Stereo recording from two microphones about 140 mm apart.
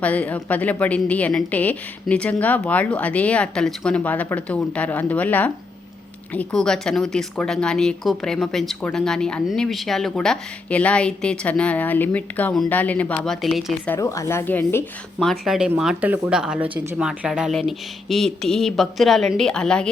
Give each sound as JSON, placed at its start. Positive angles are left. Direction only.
{"t": 0.0, "sound": "a woman's voice", "side_deg": 10}
{"t": 14.0, "sound": "a woman's voice", "side_deg": 20}
{"t": 15.2, "sound": "speech", "side_deg": 0}